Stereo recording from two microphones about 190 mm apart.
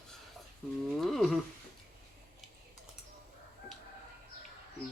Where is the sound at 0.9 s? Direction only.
Centre (ahead or behind).